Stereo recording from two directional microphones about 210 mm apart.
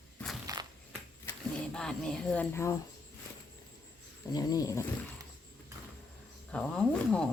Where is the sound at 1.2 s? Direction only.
5° left (ahead or behind).